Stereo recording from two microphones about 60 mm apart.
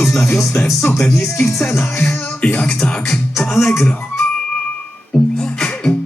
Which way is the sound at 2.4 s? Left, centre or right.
Centre.